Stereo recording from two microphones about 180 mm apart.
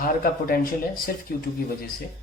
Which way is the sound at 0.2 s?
55° left (ahead or behind).